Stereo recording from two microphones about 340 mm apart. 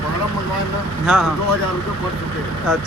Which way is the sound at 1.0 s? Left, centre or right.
Centre.